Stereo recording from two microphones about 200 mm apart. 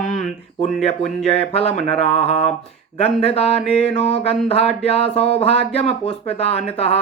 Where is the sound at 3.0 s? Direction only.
30° left (ahead or behind).